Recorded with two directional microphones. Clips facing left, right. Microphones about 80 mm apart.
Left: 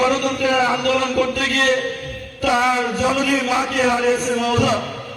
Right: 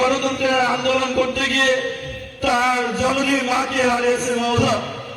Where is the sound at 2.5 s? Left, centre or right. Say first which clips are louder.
Left 1 dB; left.